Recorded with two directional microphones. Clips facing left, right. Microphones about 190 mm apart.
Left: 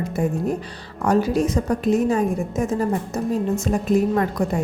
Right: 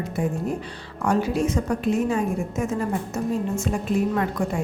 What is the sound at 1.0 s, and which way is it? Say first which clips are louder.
A woman's voice: left 3 dB; 40° left (ahead or behind).